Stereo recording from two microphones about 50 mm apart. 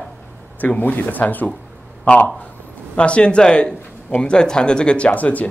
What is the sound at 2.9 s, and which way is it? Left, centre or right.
Speech, left.